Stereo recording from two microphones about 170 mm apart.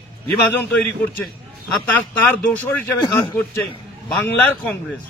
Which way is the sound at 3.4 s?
10° left (ahead or behind).